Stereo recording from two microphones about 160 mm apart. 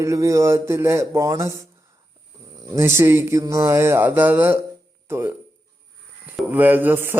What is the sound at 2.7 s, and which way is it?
Speech, 15° right (ahead or behind).